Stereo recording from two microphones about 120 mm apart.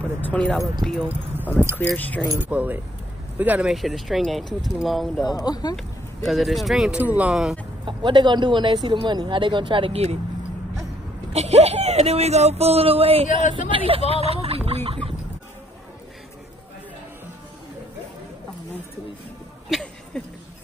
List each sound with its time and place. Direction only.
0.0 s speech: 10° left (ahead or behind)
2.3 s speech: 15° right (ahead or behind)
3.7 s speech: centre (ahead or behind)
5.3 s speech: 35° left (ahead or behind)
5.8 s speech: centre (ahead or behind)
7.8 s speech: 40° right (ahead or behind)
11.3 s speech: 60° right (ahead or behind)
13.4 s speech: 90° left
13.7 s speech: 50° right (ahead or behind)
19.7 s a sound: centre (ahead or behind)